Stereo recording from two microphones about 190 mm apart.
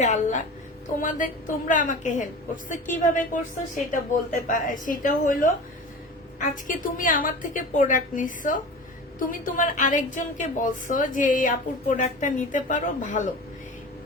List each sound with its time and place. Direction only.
0.0 s a woman's voice: 40° left (ahead or behind)